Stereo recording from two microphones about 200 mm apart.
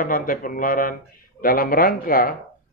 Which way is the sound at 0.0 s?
45° left (ahead or behind).